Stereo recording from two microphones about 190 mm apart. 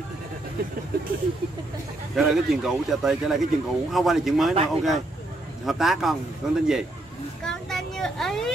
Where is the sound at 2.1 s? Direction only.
Centre (ahead or behind).